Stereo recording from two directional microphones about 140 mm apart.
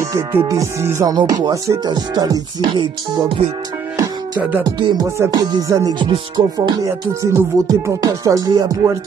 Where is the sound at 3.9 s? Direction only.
25° right (ahead or behind).